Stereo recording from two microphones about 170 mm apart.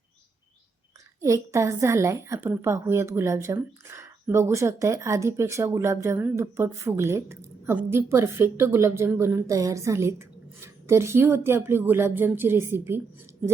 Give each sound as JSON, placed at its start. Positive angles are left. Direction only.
{"t": 1.2, "sound": "a woman's voice", "side_deg": -15}